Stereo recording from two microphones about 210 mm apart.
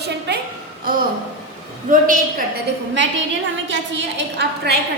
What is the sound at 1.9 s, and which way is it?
Speech, 40° right (ahead or behind).